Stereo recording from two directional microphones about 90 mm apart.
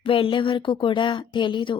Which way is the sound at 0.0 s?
85° left.